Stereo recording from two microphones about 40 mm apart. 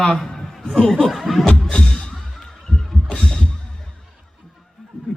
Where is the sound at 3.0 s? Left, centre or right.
Centre.